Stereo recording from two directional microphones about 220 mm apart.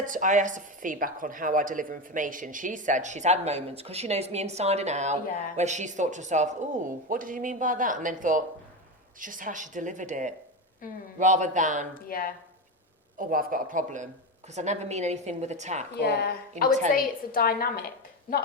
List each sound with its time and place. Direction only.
0.0 s a woman's voice: 35° right (ahead or behind)
12.0 s speech: 40° left (ahead or behind)
13.1 s a woman's voice: 40° right (ahead or behind)
16.0 s a woman's voice: 45° left (ahead or behind)